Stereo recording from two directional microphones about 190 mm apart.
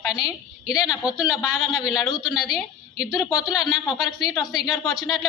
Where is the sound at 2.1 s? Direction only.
20° left (ahead or behind).